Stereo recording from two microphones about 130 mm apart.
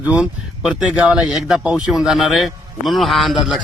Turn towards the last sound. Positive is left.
turn(degrees=0)  # may be behind; listen again after turning